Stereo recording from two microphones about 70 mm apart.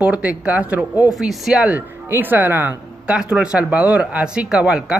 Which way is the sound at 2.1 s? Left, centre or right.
Right.